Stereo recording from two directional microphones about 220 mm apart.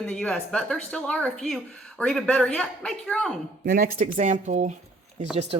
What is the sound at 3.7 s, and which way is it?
Speech, 35° right (ahead or behind).